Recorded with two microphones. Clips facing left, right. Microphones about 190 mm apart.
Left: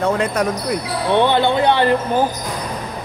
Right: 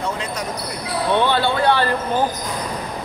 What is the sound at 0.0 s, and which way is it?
Speech, 55° left (ahead or behind).